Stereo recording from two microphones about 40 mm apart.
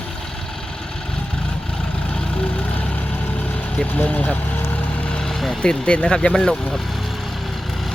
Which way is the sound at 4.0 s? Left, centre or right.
Left.